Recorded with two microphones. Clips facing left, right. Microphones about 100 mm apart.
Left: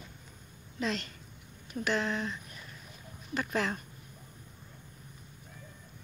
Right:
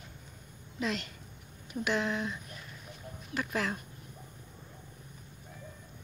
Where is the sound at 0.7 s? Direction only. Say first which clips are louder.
Even; 10° right (ahead or behind).